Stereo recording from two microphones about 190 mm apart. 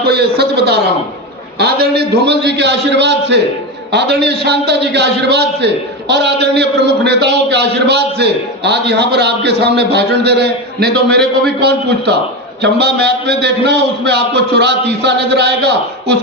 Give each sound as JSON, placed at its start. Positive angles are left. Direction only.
{"t": 0.0, "sound": "a man's voice", "side_deg": -60}